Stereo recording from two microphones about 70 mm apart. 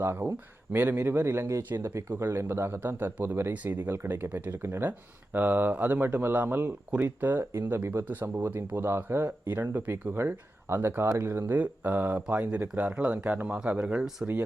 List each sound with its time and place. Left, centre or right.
0.0 s speech: right
4.3 s speech: right
4.6 s speech: right
11.5 s speech: right